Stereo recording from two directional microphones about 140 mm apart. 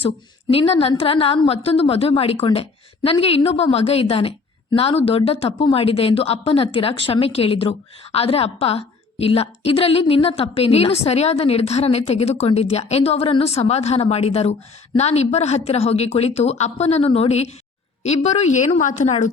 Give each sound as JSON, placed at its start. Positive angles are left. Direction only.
{"t": 0.5, "sound": "a woman's voice", "side_deg": 45}